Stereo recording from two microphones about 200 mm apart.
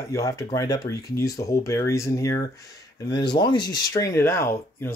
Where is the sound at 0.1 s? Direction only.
15° left (ahead or behind).